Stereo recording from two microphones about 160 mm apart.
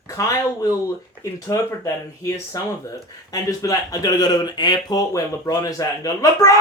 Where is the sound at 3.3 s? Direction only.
20° left (ahead or behind).